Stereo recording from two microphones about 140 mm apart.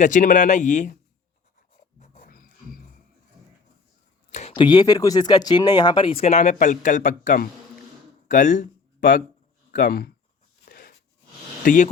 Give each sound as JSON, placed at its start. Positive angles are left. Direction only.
{"t": 0.0, "sound": "speech", "side_deg": 65}
{"t": 2.2, "sound": "music", "side_deg": 90}
{"t": 4.3, "sound": "a sound", "side_deg": 55}
{"t": 4.5, "sound": "speech", "side_deg": 35}
{"t": 8.3, "sound": "speech", "side_deg": 65}
{"t": 9.7, "sound": "speech", "side_deg": 85}
{"t": 10.7, "sound": "a sound", "side_deg": 90}
{"t": 11.6, "sound": "speech", "side_deg": 70}